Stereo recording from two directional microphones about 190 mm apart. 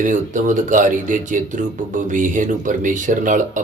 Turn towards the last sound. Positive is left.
turn(degrees=-45)  # may be behind; listen again after turning